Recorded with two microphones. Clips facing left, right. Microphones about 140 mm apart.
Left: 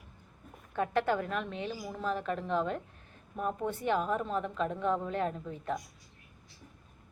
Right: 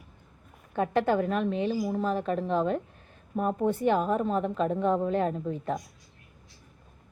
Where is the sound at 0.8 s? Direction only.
25° right (ahead or behind).